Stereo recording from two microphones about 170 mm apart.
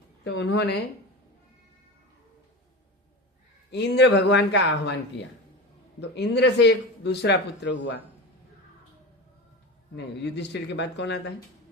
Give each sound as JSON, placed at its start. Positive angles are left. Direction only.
{"t": 0.3, "sound": "speech", "side_deg": 85}
{"t": 3.7, "sound": "speech", "side_deg": 85}
{"t": 6.0, "sound": "speech", "side_deg": 80}
{"t": 9.9, "sound": "speech", "side_deg": 90}